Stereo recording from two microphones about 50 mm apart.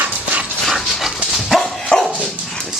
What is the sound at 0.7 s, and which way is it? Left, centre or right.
Dog, centre.